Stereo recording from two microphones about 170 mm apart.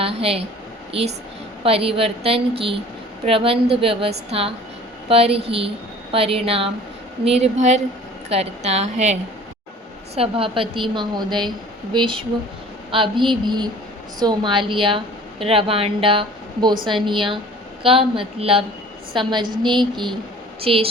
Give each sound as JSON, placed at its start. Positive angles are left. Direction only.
{"t": 0.0, "sound": "a woman's voice", "side_deg": -35}
{"t": 1.6, "sound": "a woman's voice", "side_deg": -35}
{"t": 10.2, "sound": "a woman's voice", "side_deg": -30}